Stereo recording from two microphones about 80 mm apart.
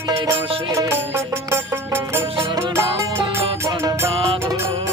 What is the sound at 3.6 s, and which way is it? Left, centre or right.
Music, right.